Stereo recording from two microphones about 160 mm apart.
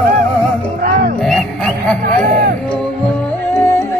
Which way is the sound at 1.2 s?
5° left (ahead or behind).